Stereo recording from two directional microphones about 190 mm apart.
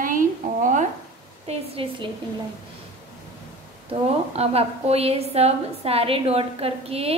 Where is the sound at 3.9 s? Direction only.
30° right (ahead or behind).